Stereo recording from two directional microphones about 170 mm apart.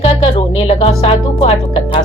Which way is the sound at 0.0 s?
35° left (ahead or behind).